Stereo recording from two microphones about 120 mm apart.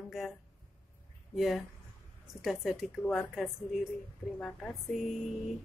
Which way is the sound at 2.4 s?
5° right (ahead or behind).